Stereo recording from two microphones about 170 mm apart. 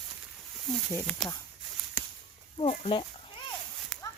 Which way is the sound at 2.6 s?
30° left (ahead or behind).